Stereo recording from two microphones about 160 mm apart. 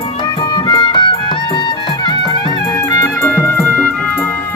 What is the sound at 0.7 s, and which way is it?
Music, 30° left (ahead or behind).